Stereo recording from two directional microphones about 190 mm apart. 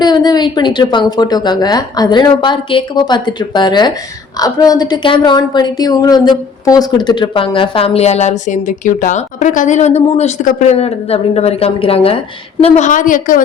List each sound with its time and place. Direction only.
0.0 s a woman's voice: 20° left (ahead or behind); by 13.4 s 45° left (ahead or behind)